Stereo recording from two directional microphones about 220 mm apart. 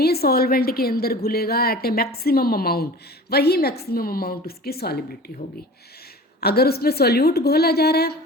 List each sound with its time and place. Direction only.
0.0 s a woman's voice: 45° left (ahead or behind)
6.4 s a woman's voice: 45° left (ahead or behind)